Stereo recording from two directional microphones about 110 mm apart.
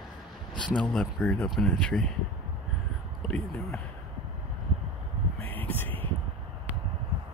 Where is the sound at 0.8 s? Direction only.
5° left (ahead or behind).